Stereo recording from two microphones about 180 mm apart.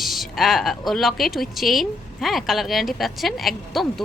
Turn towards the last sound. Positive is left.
turn(degrees=0)  # may be behind; listen again after turning